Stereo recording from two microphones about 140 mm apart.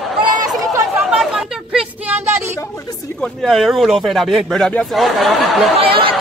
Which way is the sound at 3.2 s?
Centre (ahead or behind).